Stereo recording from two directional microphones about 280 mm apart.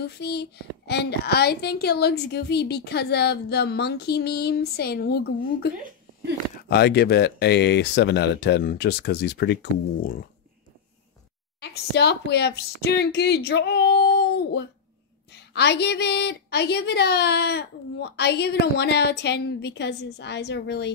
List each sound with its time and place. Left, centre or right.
0.0 s a child's voice: left
6.7 s a child's voice: left
11.6 s a child's voice: left